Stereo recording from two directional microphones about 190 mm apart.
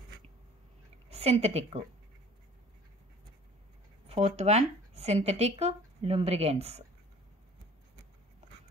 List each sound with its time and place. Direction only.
1.0 s a woman's voice: 35° right (ahead or behind)
4.1 s speech: 35° right (ahead or behind)